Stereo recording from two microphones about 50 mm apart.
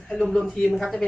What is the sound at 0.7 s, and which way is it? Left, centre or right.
Speech, centre.